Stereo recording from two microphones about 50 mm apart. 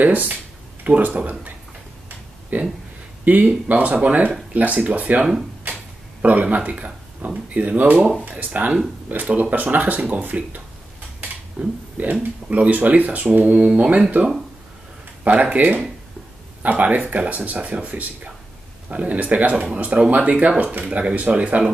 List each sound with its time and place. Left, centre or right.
0.0 s speech: right
2.5 s speech: right
6.2 s speech: right
11.6 s speech: centre
12.0 s speech: right
15.2 s speech: right